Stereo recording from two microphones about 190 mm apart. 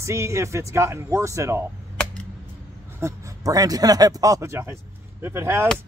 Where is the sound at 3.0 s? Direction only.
15° right (ahead or behind).